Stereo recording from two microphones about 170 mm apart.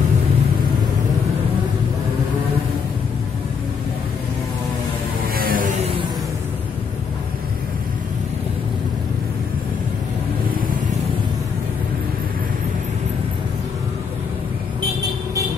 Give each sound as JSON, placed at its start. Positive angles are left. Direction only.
{"t": 5.3, "sound": "vehicle", "side_deg": -55}